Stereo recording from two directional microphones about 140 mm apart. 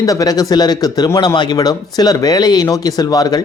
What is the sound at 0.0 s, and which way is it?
Speech, 25° left (ahead or behind).